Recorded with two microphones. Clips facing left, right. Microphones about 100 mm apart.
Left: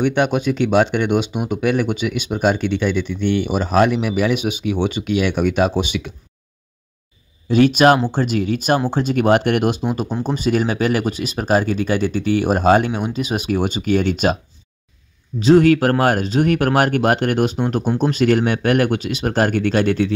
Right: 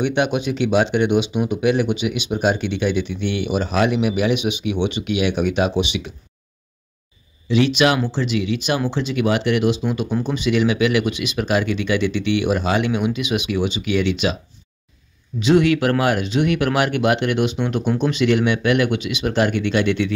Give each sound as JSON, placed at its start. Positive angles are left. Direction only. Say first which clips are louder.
{"t": 0.0, "sound": "speech", "louder": "left 2 dB", "side_deg": 45}
{"t": 7.4, "sound": "speech", "louder": "left 4 dB", "side_deg": 45}